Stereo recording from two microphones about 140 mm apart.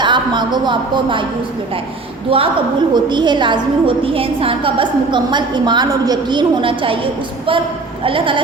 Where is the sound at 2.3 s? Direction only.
40° right (ahead or behind).